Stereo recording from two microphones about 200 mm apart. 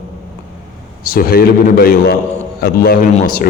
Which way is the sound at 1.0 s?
45° left (ahead or behind).